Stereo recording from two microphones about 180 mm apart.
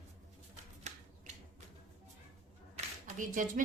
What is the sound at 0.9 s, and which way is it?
Typewriter, 40° right (ahead or behind).